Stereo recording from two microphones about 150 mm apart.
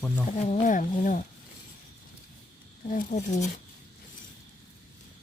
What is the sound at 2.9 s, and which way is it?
Speech, 55° left (ahead or behind).